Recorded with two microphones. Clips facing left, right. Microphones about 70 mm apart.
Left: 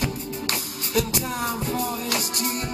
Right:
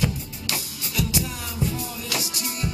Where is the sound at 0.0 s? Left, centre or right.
Left.